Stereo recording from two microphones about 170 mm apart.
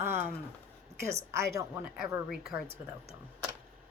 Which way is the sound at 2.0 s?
5° right (ahead or behind).